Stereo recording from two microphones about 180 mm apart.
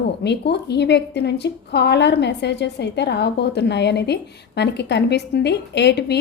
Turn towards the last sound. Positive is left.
turn(degrees=70)  # may be behind; listen again after turning